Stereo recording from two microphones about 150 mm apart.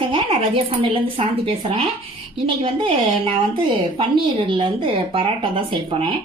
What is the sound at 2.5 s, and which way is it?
Speech, 35° right (ahead or behind).